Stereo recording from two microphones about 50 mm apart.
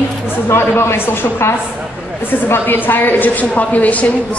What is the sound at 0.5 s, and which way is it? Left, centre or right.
Speech, left.